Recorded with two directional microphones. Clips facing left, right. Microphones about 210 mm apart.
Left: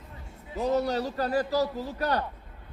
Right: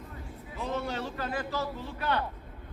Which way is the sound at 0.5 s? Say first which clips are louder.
Left 7 dB; 40° left (ahead or behind).